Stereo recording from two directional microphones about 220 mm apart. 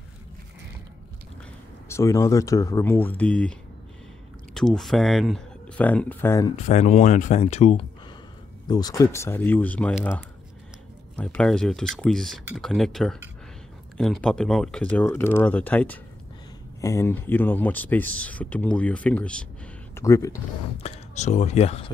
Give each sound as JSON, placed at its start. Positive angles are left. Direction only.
{"t": 1.9, "sound": "speech", "side_deg": 15}
{"t": 4.6, "sound": "speech", "side_deg": 0}
{"t": 6.5, "sound": "speech", "side_deg": 30}
{"t": 8.6, "sound": "speech", "side_deg": 15}
{"t": 20.8, "sound": "speech", "side_deg": 30}